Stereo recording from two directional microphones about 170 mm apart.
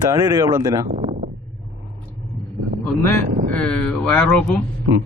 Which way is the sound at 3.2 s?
50° right (ahead or behind).